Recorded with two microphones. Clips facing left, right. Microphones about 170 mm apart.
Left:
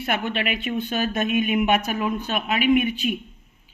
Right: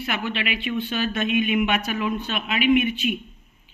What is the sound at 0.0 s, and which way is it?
A woman's voice, 50° left (ahead or behind).